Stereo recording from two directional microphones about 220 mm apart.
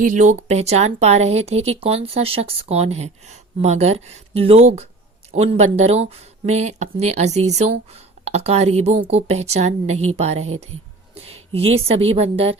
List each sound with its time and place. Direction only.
0.0 s a woman's voice: 35° right (ahead or behind)